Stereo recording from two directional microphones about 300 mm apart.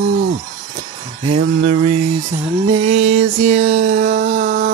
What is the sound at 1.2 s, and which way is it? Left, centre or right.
Music, centre.